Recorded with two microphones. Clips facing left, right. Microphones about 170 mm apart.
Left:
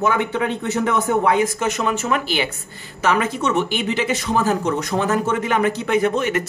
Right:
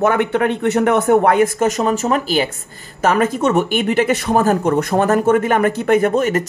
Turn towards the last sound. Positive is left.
turn(degrees=-45)  # may be behind; listen again after turning